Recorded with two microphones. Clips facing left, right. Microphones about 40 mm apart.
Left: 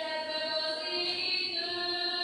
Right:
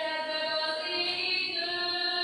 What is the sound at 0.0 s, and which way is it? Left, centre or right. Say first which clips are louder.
Music: right 3 dB; centre.